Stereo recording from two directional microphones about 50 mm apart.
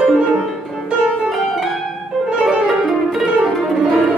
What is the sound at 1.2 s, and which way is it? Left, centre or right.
Pizzicato, centre.